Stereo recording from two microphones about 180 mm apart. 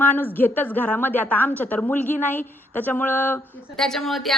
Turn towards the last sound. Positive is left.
turn(degrees=0)  # may be behind; listen again after turning